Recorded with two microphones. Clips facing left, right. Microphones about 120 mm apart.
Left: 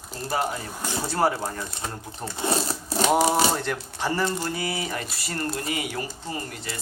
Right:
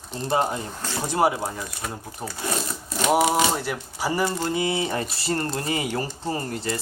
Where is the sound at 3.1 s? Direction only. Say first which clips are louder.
Right 2 dB; 15° right (ahead or behind).